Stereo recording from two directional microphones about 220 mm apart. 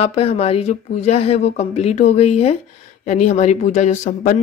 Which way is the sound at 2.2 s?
30° left (ahead or behind).